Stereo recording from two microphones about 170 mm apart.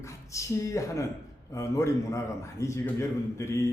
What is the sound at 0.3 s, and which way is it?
A man's voice, 20° left (ahead or behind).